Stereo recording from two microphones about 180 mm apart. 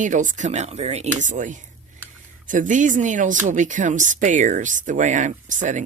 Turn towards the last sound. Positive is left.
turn(degrees=-45)  # may be behind; listen again after turning